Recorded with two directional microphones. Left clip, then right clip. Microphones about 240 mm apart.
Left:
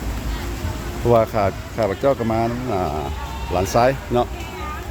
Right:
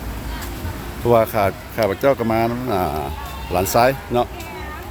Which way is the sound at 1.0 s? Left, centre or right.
Centre.